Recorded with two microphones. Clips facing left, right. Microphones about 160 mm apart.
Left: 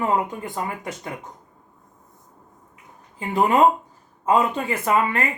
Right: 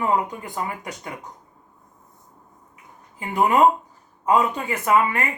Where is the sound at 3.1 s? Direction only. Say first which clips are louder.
Even; 25° left (ahead or behind).